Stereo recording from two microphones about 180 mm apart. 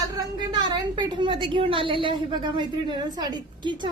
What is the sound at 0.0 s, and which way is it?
A woman's voice, 20° right (ahead or behind).